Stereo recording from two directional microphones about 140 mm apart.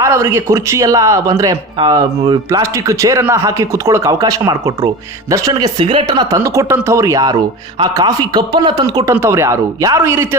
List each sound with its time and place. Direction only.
0.0 s speech: 20° right (ahead or behind)